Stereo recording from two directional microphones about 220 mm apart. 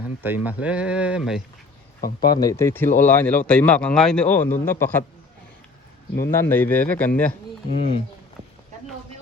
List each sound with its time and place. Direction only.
0.2 s speech: 10° right (ahead or behind)
2.0 s speech: 40° left (ahead or behind)
2.3 s speech: 15° left (ahead or behind)
6.4 s speech: 10° left (ahead or behind)
7.7 s speech: 25° left (ahead or behind)